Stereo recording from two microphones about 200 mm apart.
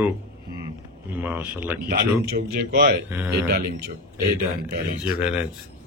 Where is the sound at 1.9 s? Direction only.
45° right (ahead or behind).